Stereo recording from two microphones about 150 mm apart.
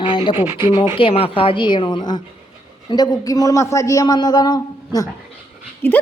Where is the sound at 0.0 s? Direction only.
35° left (ahead or behind).